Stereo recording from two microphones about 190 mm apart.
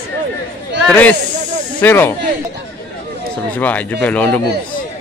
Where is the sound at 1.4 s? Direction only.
40° right (ahead or behind).